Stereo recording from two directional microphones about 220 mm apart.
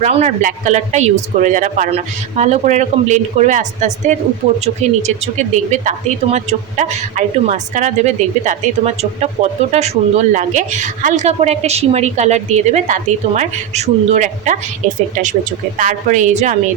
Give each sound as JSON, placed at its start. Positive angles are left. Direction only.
{"t": 0.0, "sound": "a woman's voice", "side_deg": -30}